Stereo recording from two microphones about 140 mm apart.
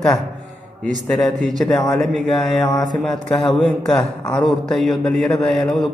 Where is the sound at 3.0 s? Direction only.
Centre (ahead or behind).